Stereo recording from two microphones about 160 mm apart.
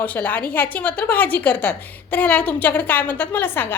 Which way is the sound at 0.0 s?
10° left (ahead or behind).